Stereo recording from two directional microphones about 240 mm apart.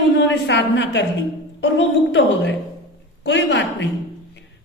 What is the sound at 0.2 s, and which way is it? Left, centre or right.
A woman's voice, left.